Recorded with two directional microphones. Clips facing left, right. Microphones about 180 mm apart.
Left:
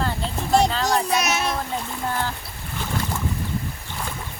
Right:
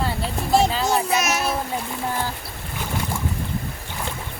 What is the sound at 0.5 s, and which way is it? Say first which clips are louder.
Child singing: even; 5° right (ahead or behind).